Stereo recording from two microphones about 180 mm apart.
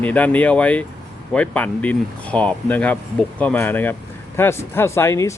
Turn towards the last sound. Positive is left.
turn(degrees=15)  # may be behind; listen again after turning